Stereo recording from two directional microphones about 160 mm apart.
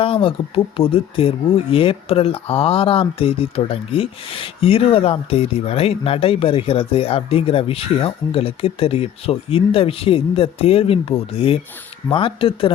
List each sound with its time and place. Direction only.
0.0 s speech: 35° left (ahead or behind)